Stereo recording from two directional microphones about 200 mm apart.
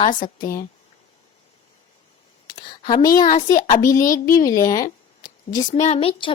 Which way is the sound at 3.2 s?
40° left (ahead or behind).